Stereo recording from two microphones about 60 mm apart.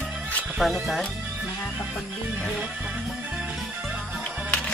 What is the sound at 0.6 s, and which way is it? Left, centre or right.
Speech, centre.